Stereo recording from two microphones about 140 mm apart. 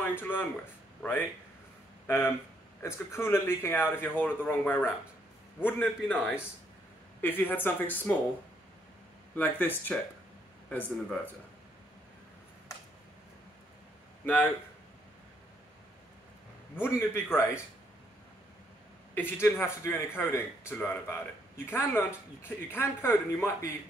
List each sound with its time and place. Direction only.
0.0 s speech: 15° left (ahead or behind)
2.0 s speech: 15° left (ahead or behind)
9.3 s speech: 15° left (ahead or behind)
14.2 s speech: 10° left (ahead or behind)
16.8 s speech: 15° left (ahead or behind)
19.1 s speech: 15° left (ahead or behind)